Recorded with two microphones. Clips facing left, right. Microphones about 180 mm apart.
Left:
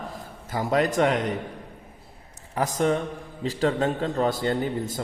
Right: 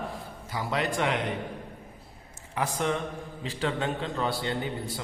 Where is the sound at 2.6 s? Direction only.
40° left (ahead or behind).